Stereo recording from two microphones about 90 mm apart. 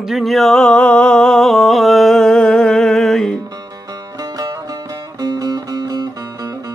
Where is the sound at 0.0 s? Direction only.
Centre (ahead or behind).